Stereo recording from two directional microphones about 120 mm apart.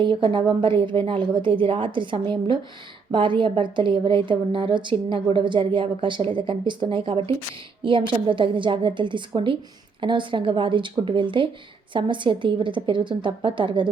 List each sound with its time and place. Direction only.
0.0 s a woman's voice: 45° right (ahead or behind)